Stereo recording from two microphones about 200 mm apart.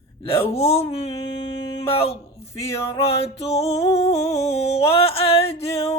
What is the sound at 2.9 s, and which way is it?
Music, 30° left (ahead or behind).